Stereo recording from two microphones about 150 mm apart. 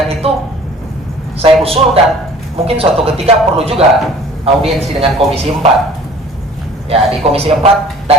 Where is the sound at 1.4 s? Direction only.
40° right (ahead or behind).